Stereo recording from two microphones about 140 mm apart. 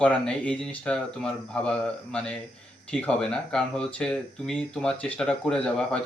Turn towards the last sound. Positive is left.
turn(degrees=5)  # may be behind; listen again after turning